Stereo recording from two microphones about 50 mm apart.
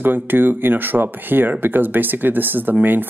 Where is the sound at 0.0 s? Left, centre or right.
Right.